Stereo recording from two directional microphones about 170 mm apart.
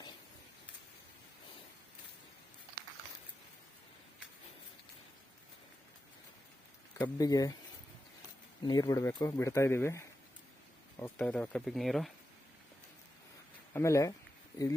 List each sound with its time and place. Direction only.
7.0 s speech: 20° left (ahead or behind)
8.6 s speech: 25° left (ahead or behind)
11.0 s speech: 5° left (ahead or behind)
13.7 s speech: 15° left (ahead or behind)